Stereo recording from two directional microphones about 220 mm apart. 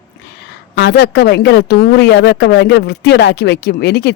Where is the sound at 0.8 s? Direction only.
50° left (ahead or behind).